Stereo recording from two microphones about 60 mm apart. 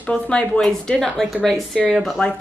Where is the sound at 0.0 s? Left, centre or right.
Centre.